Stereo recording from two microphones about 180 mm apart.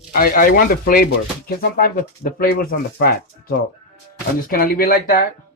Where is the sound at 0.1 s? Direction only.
50° left (ahead or behind).